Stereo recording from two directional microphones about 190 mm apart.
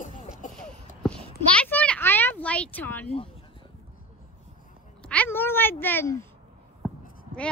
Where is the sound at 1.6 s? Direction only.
5° left (ahead or behind).